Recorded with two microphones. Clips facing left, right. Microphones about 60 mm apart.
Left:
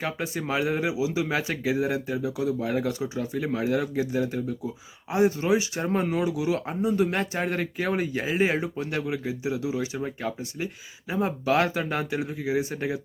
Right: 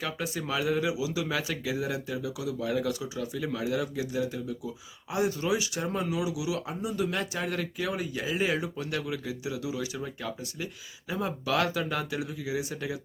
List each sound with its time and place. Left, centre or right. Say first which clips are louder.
0.0 s speech: left 3 dB; left
5.1 s speech: left 6 dB; left